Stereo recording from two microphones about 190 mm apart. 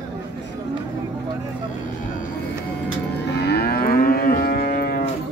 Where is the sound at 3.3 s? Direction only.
60° left (ahead or behind).